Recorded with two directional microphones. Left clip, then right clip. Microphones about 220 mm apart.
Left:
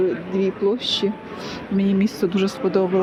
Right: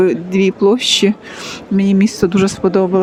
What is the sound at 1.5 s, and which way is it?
Speech, 35° right (ahead or behind).